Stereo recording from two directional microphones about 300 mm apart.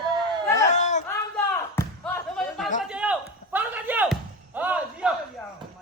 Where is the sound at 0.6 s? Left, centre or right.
Left.